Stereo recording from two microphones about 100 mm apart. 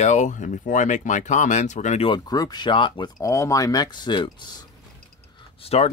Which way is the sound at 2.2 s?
40° left (ahead or behind).